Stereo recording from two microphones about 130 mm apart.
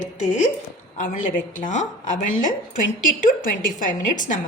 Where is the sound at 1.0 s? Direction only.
90° left.